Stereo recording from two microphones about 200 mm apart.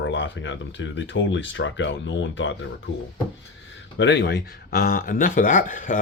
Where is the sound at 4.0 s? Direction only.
60° left (ahead or behind); by 5.9 s 40° left (ahead or behind).